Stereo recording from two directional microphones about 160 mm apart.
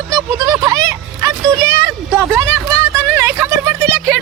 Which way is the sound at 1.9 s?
15° right (ahead or behind).